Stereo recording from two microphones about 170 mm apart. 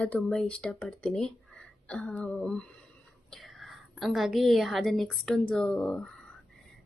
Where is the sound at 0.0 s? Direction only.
5° left (ahead or behind).